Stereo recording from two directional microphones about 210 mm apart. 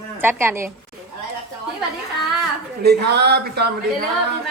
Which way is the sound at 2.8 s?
50° right (ahead or behind).